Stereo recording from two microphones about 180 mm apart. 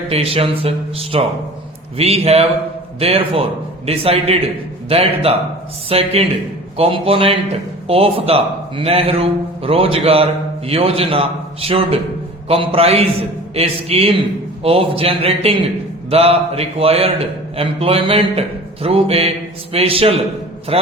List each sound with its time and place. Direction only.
0.1 s a man's voice: 35° right (ahead or behind)